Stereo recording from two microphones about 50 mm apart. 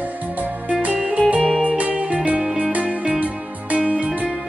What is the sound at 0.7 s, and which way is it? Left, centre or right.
Music, right.